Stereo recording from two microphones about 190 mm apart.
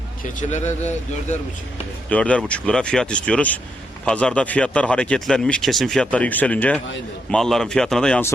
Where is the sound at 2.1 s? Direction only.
5° left (ahead or behind).